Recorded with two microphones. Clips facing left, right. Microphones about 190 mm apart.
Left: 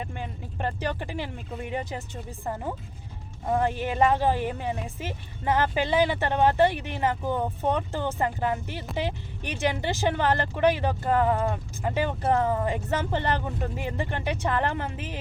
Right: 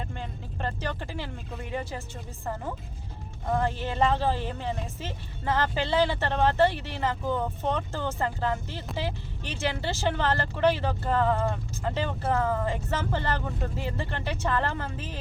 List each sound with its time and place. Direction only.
0.0 s speech: 15° left (ahead or behind)